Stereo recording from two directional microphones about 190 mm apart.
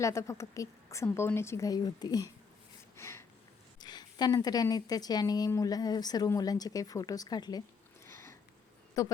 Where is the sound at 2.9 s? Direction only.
15° left (ahead or behind).